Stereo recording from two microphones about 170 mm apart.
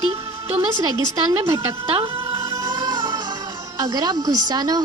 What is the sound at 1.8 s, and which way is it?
Speech, 35° right (ahead or behind).